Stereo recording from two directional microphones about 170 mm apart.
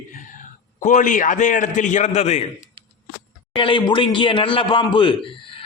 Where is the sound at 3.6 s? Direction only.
30° left (ahead or behind).